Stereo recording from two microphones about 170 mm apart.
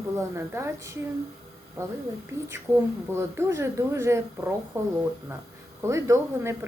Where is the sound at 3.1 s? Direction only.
15° right (ahead or behind).